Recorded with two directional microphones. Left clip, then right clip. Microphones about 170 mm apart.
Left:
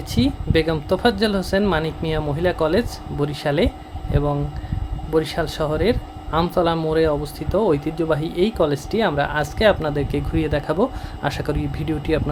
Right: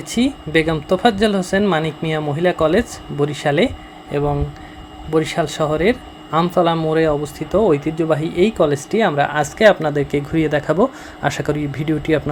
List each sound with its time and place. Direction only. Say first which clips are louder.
0.1 s speech: right 3 dB; 10° right (ahead or behind)